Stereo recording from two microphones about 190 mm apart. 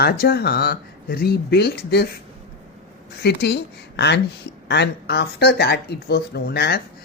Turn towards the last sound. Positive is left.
turn(degrees=55)  # may be behind; listen again after turning